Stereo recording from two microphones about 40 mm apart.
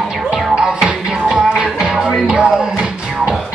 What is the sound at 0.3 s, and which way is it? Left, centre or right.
Music, centre.